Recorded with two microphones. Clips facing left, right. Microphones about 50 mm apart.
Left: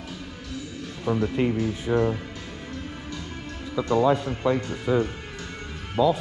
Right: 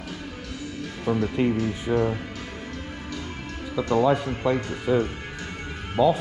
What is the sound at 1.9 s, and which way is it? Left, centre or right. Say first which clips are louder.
Speech: even; centre.